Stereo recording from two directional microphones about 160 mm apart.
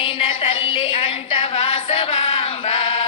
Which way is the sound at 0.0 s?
35° left (ahead or behind).